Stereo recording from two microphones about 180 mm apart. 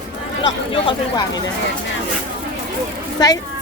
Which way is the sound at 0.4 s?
30° left (ahead or behind).